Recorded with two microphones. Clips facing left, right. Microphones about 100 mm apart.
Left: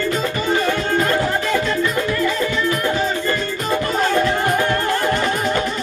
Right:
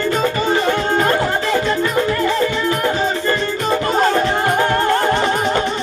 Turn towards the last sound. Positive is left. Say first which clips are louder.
# right 3 dB
turn(degrees=-30)  # may be behind; listen again after turning